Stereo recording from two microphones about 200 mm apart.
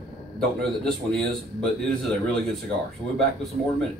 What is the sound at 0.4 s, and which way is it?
A man's voice, centre (ahead or behind).